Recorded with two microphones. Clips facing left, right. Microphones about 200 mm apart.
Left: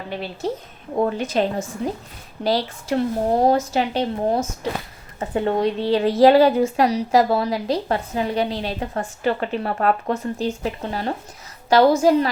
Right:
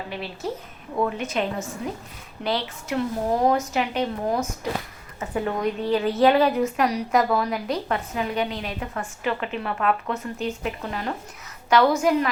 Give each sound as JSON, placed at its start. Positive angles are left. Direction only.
{"t": 0.9, "sound": "a woman's voice", "side_deg": 35}